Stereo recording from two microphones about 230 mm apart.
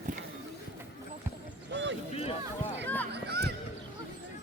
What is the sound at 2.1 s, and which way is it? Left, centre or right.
Speech, left.